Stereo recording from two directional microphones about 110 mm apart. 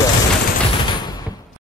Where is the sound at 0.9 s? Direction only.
40° left (ahead or behind).